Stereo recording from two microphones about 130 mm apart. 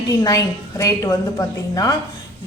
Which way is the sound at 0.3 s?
25° left (ahead or behind).